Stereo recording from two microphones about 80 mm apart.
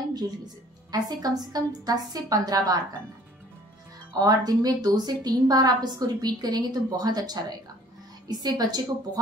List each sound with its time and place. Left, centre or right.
0.9 s a woman's voice: right
4.1 s a woman's voice: right